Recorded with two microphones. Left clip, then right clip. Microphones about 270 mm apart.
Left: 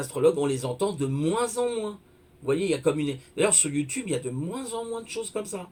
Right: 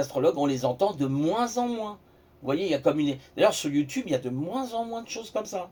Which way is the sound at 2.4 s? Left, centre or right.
Centre.